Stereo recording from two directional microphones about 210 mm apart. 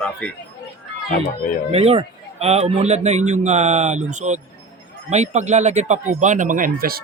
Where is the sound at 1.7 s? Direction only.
30° right (ahead or behind).